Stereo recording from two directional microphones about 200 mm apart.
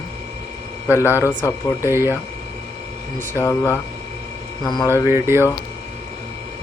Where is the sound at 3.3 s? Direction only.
15° left (ahead or behind).